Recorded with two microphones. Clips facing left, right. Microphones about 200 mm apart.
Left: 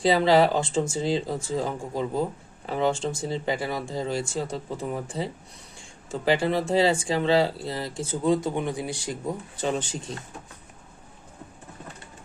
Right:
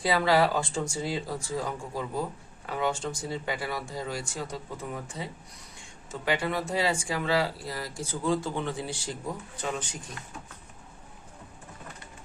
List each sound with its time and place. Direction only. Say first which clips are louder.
0.0 s speech: left 5 dB; 25° left (ahead or behind)
9.6 s speech: left 6 dB; 30° left (ahead or behind)